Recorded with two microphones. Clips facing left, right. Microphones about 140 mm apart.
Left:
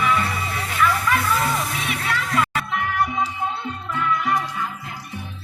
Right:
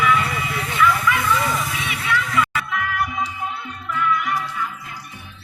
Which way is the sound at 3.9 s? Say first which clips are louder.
Even; 30° left (ahead or behind).